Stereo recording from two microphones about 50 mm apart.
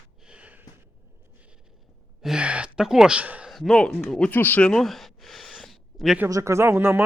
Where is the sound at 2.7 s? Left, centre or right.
Centre.